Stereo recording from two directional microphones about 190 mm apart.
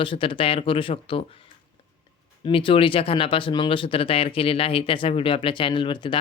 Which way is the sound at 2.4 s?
25° left (ahead or behind).